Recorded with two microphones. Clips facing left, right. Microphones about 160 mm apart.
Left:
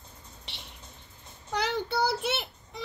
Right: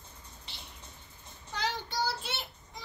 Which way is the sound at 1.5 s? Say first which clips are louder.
Left 6 dB; 70° left (ahead or behind).